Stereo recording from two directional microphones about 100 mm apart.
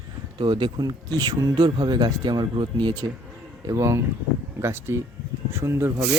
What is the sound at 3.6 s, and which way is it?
Speech, 30° right (ahead or behind).